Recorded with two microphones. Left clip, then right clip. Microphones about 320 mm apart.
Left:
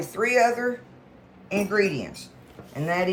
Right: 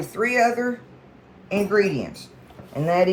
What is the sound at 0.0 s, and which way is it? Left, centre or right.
Speech, centre.